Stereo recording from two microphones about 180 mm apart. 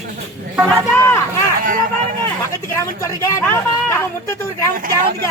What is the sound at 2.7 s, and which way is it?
Speech, 15° left (ahead or behind).